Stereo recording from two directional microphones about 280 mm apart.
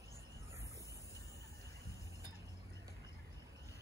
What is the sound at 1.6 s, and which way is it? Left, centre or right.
Train, centre.